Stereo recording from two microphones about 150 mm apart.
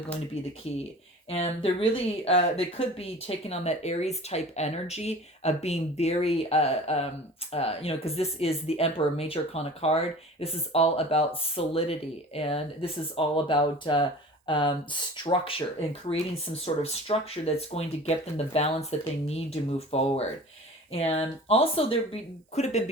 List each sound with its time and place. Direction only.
1.3 s speech: 45° left (ahead or behind)